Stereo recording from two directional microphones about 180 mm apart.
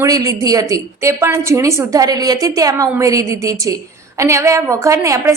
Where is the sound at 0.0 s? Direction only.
20° right (ahead or behind).